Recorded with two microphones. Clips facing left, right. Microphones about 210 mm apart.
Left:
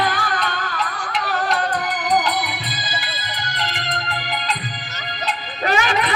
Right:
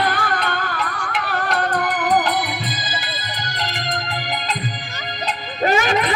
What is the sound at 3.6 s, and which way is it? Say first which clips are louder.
Music: right 2 dB; 40° right (ahead or behind).